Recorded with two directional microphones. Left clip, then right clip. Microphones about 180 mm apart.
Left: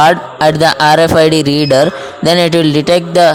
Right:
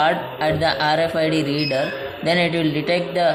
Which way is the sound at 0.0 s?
60° left (ahead or behind).